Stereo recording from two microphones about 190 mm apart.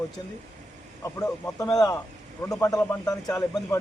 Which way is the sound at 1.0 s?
15° left (ahead or behind).